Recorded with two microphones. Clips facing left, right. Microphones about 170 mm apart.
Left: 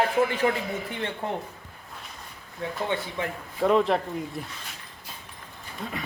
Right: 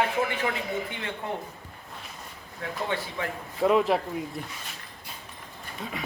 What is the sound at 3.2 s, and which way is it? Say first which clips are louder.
Speech: left 2 dB; 20° left (ahead or behind).